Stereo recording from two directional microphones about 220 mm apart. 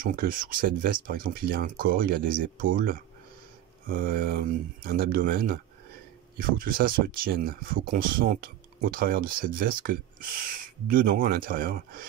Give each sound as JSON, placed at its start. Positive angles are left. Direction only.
{"t": 0.0, "sound": "speech", "side_deg": -40}